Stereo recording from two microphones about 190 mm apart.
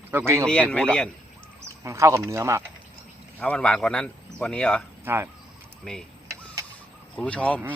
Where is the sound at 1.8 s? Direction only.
15° right (ahead or behind).